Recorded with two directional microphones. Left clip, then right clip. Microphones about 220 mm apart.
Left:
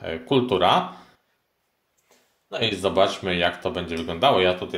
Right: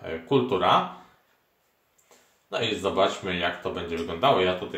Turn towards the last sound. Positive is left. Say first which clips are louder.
# left 3 dB
turn(degrees=45)  # may be behind; listen again after turning